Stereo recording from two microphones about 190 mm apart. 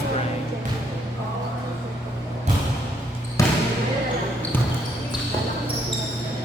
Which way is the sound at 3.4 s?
15° left (ahead or behind).